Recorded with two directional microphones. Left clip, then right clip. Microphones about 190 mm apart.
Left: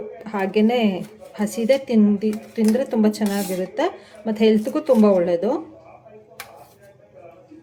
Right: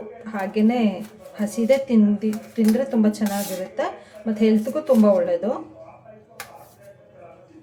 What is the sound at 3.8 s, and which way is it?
Speech, 50° left (ahead or behind).